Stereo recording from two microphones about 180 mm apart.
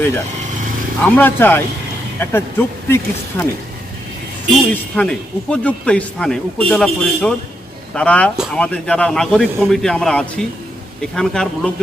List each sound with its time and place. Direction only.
1.0 s speech: 10° left (ahead or behind)
4.7 s speech: 5° left (ahead or behind)